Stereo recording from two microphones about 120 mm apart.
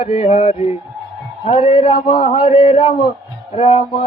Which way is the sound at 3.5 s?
55° left (ahead or behind).